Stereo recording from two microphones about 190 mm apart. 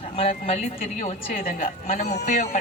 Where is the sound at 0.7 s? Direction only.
50° left (ahead or behind).